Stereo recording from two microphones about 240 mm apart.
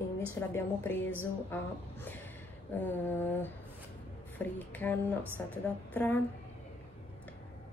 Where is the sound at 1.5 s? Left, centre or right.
Centre.